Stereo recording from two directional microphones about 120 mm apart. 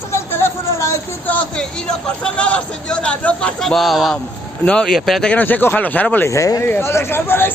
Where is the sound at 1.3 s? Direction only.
10° left (ahead or behind).